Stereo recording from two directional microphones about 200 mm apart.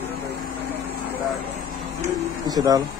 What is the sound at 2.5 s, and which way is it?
Speech, 20° right (ahead or behind).